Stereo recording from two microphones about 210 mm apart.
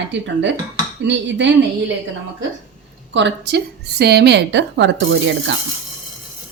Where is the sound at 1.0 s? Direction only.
60° right (ahead or behind).